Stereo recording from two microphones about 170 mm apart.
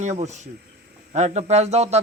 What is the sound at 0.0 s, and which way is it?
Speech, 45° right (ahead or behind).